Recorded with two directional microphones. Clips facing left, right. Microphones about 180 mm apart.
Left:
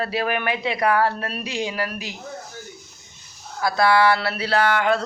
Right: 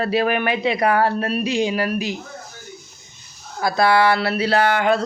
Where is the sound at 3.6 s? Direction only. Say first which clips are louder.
Right 1 dB; 20° right (ahead or behind).